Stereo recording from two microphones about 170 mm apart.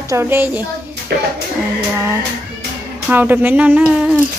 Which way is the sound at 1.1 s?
70° right (ahead or behind).